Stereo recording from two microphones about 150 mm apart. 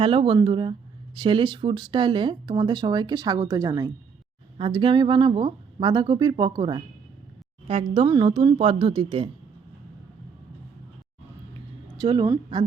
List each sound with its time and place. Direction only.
0.0 s speech: 35° right (ahead or behind)
8.0 s speech: 30° right (ahead or behind)
11.9 s speech: 30° right (ahead or behind)